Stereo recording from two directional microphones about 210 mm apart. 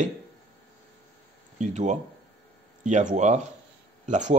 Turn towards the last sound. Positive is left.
turn(degrees=-35)  # may be behind; listen again after turning